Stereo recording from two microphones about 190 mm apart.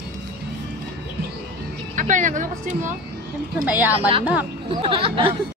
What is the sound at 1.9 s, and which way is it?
Speech, 40° right (ahead or behind).